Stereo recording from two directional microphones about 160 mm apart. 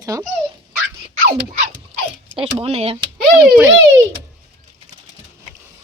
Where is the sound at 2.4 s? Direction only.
40° right (ahead or behind).